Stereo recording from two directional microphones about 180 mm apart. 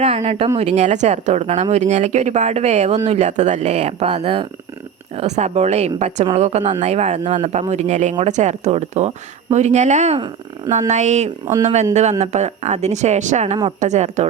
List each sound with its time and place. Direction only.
0.0 s speech: 35° right (ahead or behind)